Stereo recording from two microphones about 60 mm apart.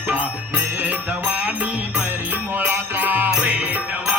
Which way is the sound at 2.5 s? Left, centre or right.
Right.